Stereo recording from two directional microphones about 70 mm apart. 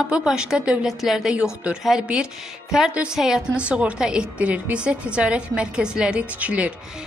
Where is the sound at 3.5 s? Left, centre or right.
Centre.